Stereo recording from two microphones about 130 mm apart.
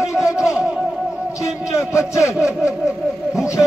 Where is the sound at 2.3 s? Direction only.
5° right (ahead or behind).